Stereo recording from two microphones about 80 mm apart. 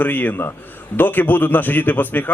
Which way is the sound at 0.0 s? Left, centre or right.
Left.